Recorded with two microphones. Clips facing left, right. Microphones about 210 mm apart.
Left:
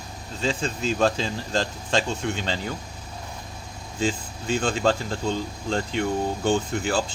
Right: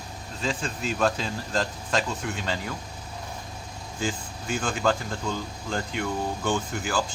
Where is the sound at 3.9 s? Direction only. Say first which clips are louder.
Left 4 dB; 25° left (ahead or behind).